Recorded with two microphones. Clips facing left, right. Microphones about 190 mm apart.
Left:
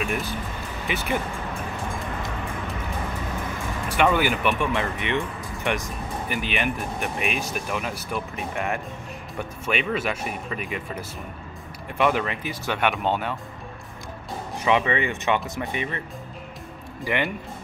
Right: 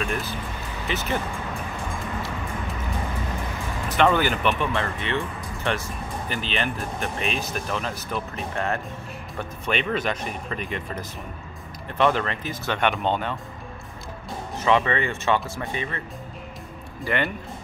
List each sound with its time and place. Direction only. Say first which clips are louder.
0.0 s speech: left 1 dB; 15° left (ahead or behind)
3.9 s speech: right 1 dB; 10° left (ahead or behind)
14.6 s speech: right 1 dB; 15° left (ahead or behind)
17.0 s speech: even; 15° left (ahead or behind)